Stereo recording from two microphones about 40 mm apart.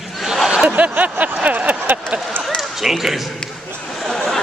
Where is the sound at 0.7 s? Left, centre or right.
Right.